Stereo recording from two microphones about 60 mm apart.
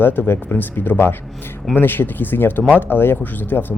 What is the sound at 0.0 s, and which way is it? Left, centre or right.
Speech, left.